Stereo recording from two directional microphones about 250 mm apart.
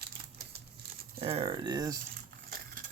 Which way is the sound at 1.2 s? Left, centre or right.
Right.